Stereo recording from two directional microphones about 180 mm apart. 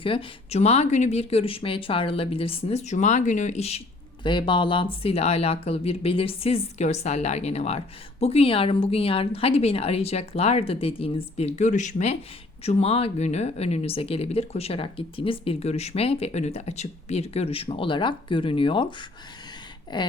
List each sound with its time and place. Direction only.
0.0 s speech: 30° left (ahead or behind)